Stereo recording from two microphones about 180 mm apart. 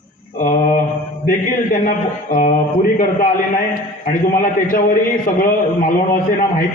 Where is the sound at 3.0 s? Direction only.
50° left (ahead or behind).